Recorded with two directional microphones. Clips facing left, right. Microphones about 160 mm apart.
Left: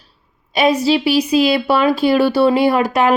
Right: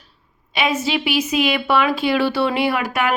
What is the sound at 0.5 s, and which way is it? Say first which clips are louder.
A woman's voice: left 7 dB; 40° left (ahead or behind).